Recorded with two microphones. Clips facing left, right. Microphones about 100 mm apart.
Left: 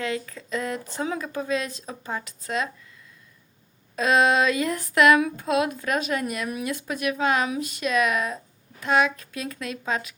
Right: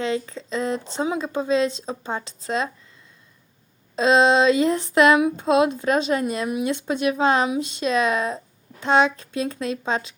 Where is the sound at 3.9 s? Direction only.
25° right (ahead or behind).